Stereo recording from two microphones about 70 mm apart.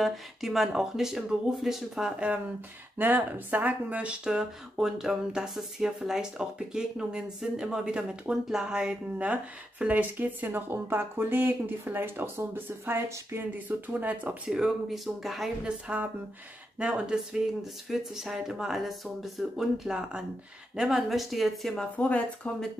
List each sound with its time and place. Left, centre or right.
0.0 s speech: centre
3.0 s speech: right; by 15.5 s centre
15.6 s speech: centre
21.9 s speech: left